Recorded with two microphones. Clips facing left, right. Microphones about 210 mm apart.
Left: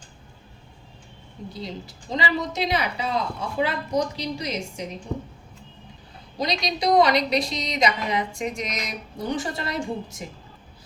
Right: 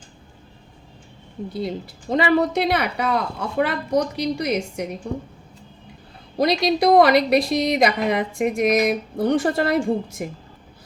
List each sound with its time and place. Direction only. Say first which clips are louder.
1.5 s a woman's voice: right 8 dB; 60° right (ahead or behind)
6.3 s a woman's voice: right 8 dB; 55° right (ahead or behind)